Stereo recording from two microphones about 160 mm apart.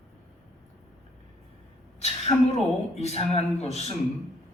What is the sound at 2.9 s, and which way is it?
A man's voice, 45° left (ahead or behind).